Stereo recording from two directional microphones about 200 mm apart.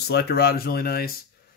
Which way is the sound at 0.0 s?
55° left (ahead or behind).